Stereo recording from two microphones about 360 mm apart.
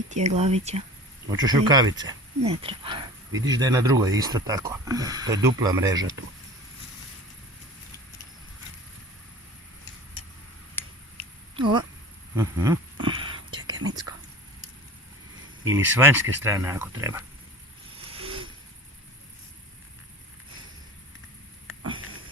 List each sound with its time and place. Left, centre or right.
0.1 s speech: centre
10.8 s finger snapping: centre
11.5 s speech: centre
12.4 s a sound: centre
13.2 s whispering: centre
15.6 s speech: centre